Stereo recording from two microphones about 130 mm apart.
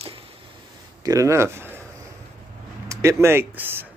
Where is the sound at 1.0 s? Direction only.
25° right (ahead or behind).